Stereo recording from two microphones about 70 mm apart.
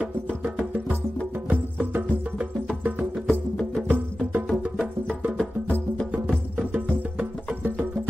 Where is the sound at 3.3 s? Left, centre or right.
Centre.